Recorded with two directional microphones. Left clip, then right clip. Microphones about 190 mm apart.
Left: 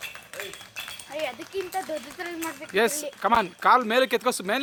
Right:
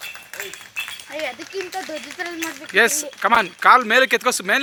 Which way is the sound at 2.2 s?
50° right (ahead or behind).